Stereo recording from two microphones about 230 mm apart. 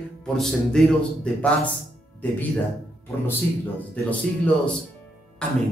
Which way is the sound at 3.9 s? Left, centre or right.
Centre.